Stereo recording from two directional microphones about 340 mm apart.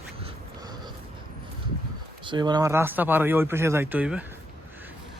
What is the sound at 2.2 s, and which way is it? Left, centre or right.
Speech, centre.